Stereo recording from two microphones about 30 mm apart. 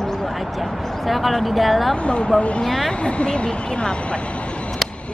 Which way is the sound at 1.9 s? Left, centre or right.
Left.